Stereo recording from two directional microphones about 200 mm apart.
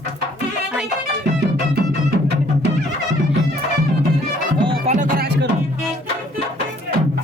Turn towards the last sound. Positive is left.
turn(degrees=-40)  # may be behind; listen again after turning